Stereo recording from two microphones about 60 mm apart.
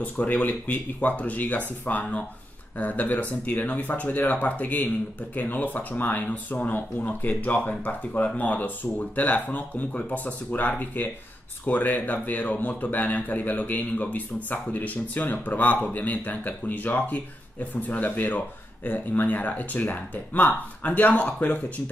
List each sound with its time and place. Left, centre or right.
0.0 s speech: left